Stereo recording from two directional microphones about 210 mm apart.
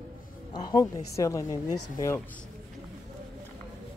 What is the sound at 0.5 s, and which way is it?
Speech, 20° left (ahead or behind).